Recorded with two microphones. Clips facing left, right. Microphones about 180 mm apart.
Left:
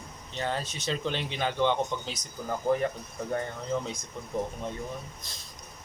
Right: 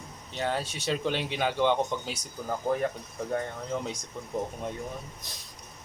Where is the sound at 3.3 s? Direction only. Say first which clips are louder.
Left 1 dB; centre (ahead or behind).